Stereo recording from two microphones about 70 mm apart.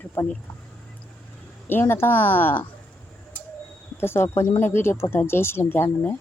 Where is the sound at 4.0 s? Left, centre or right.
Left.